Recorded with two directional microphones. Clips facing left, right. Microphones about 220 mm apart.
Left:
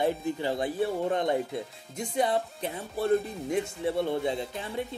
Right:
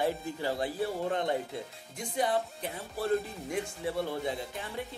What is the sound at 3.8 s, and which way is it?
Speech, 25° left (ahead or behind).